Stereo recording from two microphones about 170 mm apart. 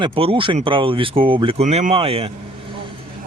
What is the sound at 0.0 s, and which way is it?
Speech, 30° right (ahead or behind).